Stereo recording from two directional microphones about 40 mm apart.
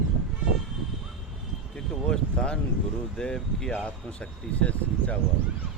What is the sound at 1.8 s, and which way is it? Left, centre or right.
Speech, centre.